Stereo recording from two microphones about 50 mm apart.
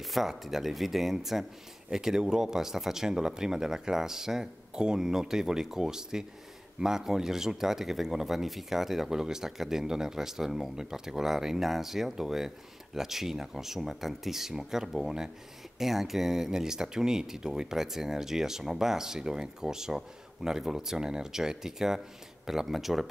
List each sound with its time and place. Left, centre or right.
0.0 s speech: centre